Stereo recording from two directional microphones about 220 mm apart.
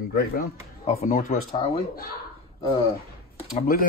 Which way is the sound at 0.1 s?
40° left (ahead or behind).